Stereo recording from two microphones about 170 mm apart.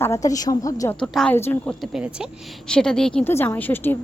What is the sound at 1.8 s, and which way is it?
A woman's voice, 5° right (ahead or behind).